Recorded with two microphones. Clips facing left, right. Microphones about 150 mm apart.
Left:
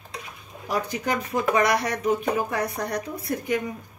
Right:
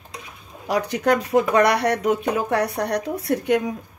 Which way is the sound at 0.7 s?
75° right (ahead or behind).